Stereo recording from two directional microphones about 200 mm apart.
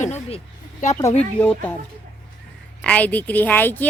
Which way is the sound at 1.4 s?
10° left (ahead or behind).